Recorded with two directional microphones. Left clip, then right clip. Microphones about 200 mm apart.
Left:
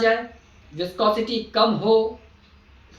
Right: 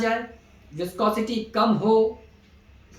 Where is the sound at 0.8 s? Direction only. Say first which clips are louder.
Left 3 dB; 15° right (ahead or behind).